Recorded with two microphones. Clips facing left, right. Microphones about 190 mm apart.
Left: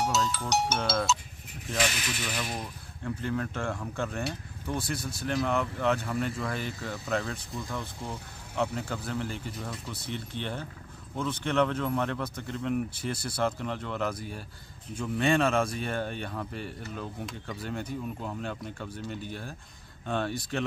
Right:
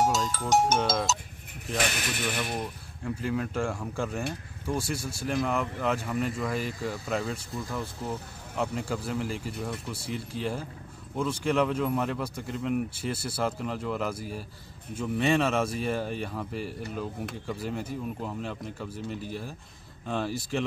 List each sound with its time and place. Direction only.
0.0 s speech: 45° right (ahead or behind)
3.2 s speech: 10° right (ahead or behind)